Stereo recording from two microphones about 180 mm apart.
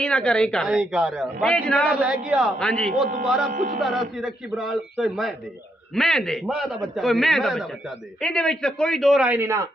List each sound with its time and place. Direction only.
0.0 s a man's voice: 5° left (ahead or behind)
3.5 s speech: 50° right (ahead or behind)
3.8 s a man's voice: centre (ahead or behind)